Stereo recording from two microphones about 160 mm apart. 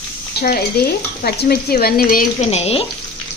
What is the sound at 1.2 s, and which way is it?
Speech, 80° left.